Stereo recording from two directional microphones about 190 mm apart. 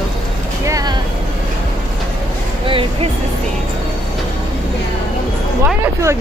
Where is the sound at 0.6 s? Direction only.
20° right (ahead or behind).